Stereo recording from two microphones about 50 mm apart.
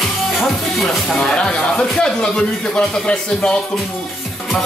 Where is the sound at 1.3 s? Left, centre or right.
Centre.